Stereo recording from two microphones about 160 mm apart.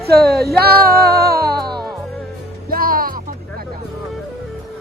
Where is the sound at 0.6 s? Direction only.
75° right (ahead or behind).